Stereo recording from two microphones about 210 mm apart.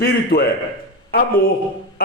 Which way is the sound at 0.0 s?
45° left (ahead or behind).